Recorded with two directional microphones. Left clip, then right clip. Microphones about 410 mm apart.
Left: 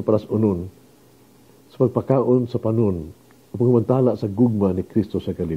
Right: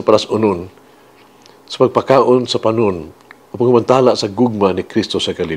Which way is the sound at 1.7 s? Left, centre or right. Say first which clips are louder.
Right 8 dB; centre.